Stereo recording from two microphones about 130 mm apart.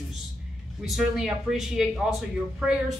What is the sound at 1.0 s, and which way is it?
A woman's voice, centre (ahead or behind).